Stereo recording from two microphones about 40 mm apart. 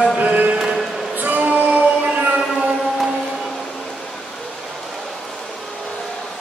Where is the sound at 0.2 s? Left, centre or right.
Right.